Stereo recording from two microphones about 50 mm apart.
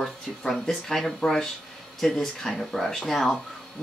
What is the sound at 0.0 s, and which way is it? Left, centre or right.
Speech, centre.